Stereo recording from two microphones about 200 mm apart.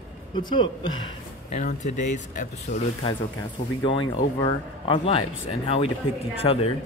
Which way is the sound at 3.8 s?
25° left (ahead or behind).